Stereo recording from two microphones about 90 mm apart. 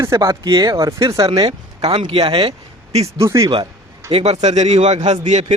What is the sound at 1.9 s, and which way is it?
Speech, 85° right.